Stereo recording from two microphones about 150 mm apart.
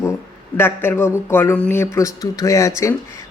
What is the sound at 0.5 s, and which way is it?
A man's voice, 15° left (ahead or behind).